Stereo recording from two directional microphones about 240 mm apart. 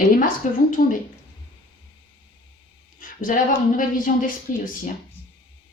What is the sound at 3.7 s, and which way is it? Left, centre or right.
Speech, left.